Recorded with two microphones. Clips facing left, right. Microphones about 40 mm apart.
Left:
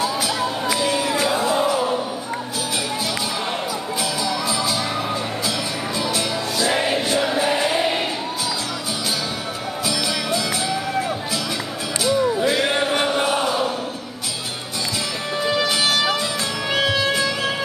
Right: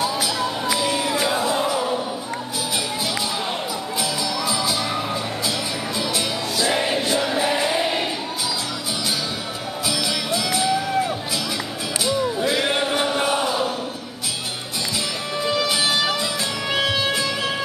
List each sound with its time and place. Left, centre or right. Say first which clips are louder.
0.7 s music: left 1 dB; centre
1.5 s music: left 2 dB; centre
4.5 s music: left 1 dB; centre
6.1 s music: left 1 dB; centre
9.8 s music: left 1 dB; centre
12.2 s music: left 3 dB; centre
13.1 s chant: left 1 dB; centre
15.4 s music: left 1 dB; centre
16.7 s music: left 2 dB; centre